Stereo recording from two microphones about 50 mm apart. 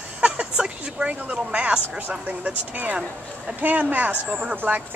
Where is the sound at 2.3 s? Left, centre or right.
Right.